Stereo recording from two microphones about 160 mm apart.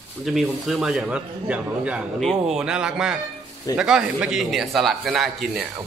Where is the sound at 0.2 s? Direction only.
Centre (ahead or behind).